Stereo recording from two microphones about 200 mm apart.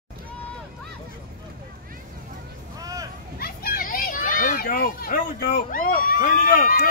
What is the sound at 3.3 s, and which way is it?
Children playing, 50° left (ahead or behind).